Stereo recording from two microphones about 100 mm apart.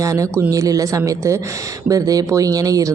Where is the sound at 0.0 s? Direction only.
35° right (ahead or behind).